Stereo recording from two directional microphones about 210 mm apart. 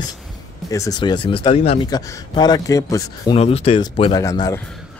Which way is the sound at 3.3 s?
30° left (ahead or behind).